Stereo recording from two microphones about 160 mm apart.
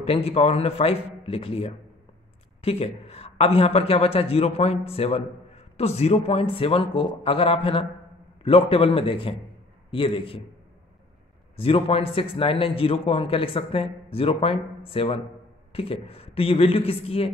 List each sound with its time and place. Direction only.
0.0 s a man's voice: 40° left (ahead or behind)
11.5 s a man's voice: 35° left (ahead or behind)